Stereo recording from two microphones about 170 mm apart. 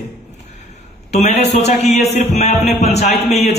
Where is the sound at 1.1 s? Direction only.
40° left (ahead or behind).